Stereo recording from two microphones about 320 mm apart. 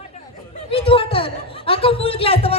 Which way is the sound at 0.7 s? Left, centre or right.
Centre.